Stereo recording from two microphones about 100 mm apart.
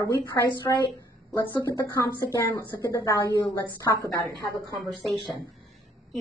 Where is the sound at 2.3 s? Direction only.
40° left (ahead or behind).